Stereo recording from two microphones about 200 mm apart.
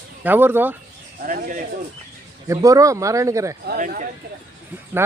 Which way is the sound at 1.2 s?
45° right (ahead or behind).